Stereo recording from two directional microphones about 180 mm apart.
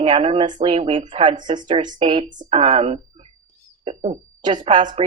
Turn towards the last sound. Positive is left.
turn(degrees=-25)  # may be behind; listen again after turning